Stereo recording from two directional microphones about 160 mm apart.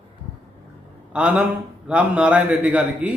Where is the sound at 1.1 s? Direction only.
10° right (ahead or behind).